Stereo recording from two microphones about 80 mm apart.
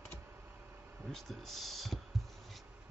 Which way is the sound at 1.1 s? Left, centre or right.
Centre.